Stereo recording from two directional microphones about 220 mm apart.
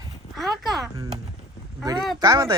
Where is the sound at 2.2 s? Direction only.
20° right (ahead or behind).